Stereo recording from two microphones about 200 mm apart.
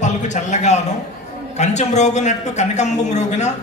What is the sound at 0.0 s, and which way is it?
A man's voice, 35° left (ahead or behind).